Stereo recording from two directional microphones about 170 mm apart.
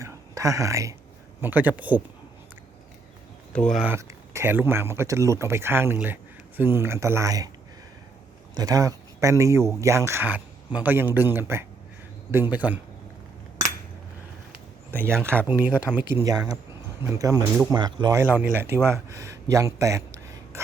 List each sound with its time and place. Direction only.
0.0 s a sound: 20° right (ahead or behind)
1.4 s speech: 10° right (ahead or behind)
3.5 s speech: 5° left (ahead or behind)
3.8 s speech: 15° right (ahead or behind)
8.5 s speech: 20° right (ahead or behind)
14.8 s speech: 15° right (ahead or behind)
18.2 s speech: 10° right (ahead or behind)